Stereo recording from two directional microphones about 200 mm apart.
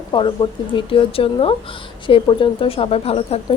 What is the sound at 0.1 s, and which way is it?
A woman's voice, 25° left (ahead or behind).